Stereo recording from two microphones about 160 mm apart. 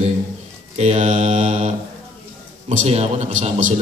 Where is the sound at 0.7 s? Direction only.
45° right (ahead or behind).